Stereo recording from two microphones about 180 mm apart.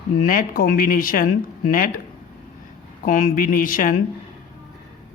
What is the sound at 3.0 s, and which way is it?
Speech, 50° left (ahead or behind).